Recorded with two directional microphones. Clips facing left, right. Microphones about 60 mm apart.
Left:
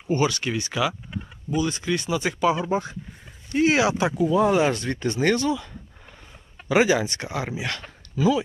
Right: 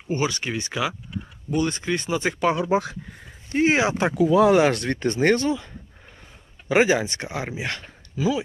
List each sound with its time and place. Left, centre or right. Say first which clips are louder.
0.1 s speech: left 2 dB; right
1.5 s speech: right 1 dB; right
2.5 s speech: right 4 dB; right
3.5 s speech: even; right
4.1 s speech: right 3 dB; right
8.1 s speech: left 3 dB; centre